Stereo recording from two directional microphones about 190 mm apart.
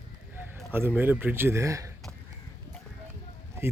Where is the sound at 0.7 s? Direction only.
10° right (ahead or behind).